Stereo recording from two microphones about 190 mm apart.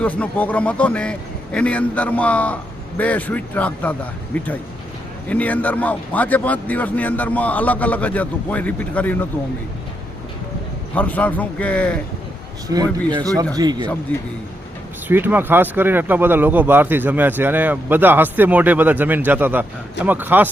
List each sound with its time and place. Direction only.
0.0 s a man's voice: 5° left (ahead or behind)
5.3 s a man's voice: 10° left (ahead or behind)
10.9 s a man's voice: 5° left (ahead or behind)
12.6 s speech: 20° right (ahead or behind)
14.1 s a man's voice: 10° left (ahead or behind)
15.0 s speech: 10° right (ahead or behind)